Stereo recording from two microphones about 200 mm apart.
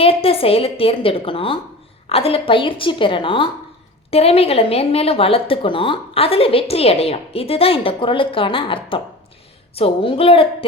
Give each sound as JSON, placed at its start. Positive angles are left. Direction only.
{"t": 0.0, "sound": "a woman's voice", "side_deg": 30}